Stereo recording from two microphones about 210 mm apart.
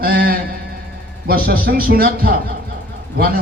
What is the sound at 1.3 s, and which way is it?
Speech, 45° right (ahead or behind).